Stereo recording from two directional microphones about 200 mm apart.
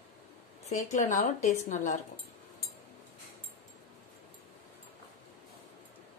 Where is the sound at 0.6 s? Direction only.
35° left (ahead or behind).